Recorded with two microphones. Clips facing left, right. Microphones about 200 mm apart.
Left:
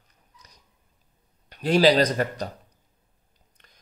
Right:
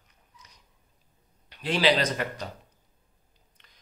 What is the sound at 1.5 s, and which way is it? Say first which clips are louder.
Speech: left 6 dB; 40° left (ahead or behind).